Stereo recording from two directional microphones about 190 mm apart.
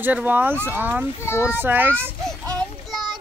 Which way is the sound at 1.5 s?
10° right (ahead or behind).